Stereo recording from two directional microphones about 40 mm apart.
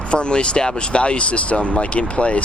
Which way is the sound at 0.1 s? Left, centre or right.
Left.